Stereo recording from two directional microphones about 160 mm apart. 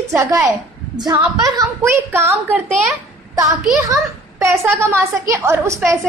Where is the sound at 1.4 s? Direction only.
20° right (ahead or behind).